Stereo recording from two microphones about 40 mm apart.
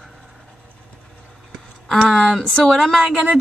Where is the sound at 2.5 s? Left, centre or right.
Centre.